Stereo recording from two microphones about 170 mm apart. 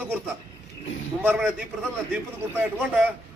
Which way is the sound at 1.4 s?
5° left (ahead or behind).